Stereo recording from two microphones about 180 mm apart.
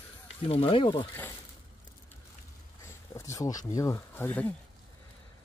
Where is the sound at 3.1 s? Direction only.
15° left (ahead or behind).